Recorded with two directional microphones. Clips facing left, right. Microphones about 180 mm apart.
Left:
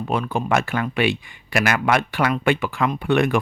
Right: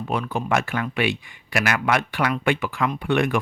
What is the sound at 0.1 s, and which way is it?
Speech, 25° left (ahead or behind).